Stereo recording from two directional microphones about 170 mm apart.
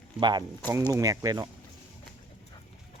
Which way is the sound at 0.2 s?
25° right (ahead or behind).